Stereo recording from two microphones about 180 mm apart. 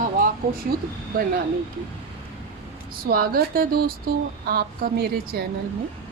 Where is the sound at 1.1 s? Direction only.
55° right (ahead or behind).